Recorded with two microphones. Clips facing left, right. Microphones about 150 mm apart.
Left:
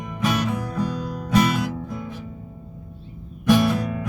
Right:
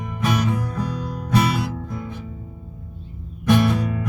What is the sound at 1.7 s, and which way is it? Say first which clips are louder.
Music: even; 5° left (ahead or behind).